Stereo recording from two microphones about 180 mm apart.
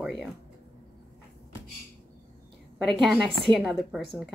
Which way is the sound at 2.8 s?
Centre (ahead or behind).